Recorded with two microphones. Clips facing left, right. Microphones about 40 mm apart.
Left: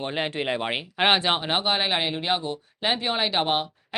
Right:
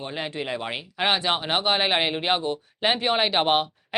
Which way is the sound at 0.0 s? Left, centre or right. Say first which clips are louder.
Left 3 dB; left.